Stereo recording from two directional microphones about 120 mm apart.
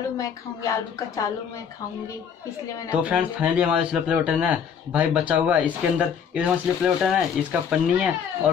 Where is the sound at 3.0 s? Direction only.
10° right (ahead or behind).